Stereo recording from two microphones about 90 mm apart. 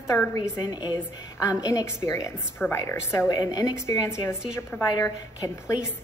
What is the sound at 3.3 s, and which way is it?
A woman's voice, 45° left (ahead or behind).